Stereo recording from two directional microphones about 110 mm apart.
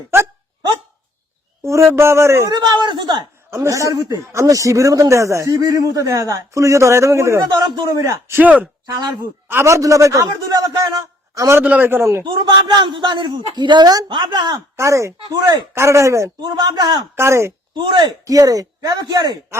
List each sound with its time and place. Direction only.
1.6 s speech: 25° right (ahead or behind)
2.5 s speech: 40° right (ahead or behind)
3.5 s speech: 25° right (ahead or behind)
8.3 s speech: 15° right (ahead or behind)
11.6 s speech: 15° right (ahead or behind)
12.2 s a man's voice: 45° right (ahead or behind)
14.8 s speech: 25° right (ahead or behind)
17.2 s speech: 25° right (ahead or behind)
17.7 s speech: 45° right (ahead or behind)